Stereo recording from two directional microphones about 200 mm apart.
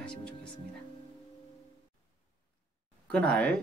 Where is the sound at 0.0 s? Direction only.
5° left (ahead or behind).